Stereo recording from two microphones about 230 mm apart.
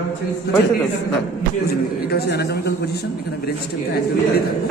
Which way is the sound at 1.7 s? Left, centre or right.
Left.